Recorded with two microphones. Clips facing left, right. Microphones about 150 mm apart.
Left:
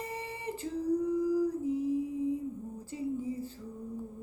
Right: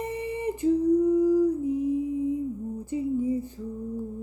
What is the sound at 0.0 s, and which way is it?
Humming, 20° right (ahead or behind).